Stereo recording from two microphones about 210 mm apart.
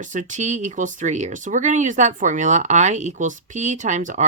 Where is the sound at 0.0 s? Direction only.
35° right (ahead or behind).